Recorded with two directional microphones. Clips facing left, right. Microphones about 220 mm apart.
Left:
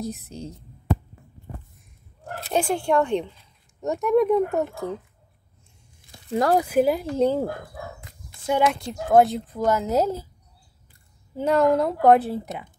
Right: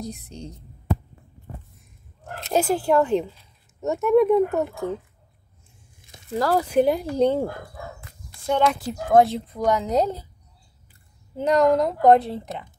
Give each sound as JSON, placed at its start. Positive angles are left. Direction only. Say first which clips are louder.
{"t": 0.0, "sound": "speech", "louder": "left 2 dB", "side_deg": 5}
{"t": 2.5, "sound": "speech", "louder": "right 2 dB", "side_deg": -5}
{"t": 6.3, "sound": "speech", "louder": "left 1 dB", "side_deg": 20}
{"t": 6.7, "sound": "speech", "louder": "right 1 dB", "side_deg": 0}
{"t": 11.3, "sound": "speech", "louder": "right 1 dB", "side_deg": 5}